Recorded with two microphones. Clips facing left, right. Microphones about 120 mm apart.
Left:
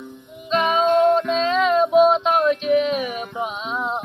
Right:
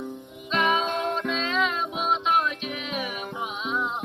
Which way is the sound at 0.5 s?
30° left (ahead or behind).